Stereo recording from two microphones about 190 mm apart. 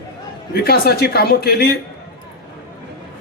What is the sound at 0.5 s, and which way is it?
Speech, 55° left (ahead or behind).